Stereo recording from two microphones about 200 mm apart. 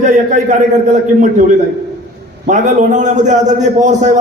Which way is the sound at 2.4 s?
40° right (ahead or behind).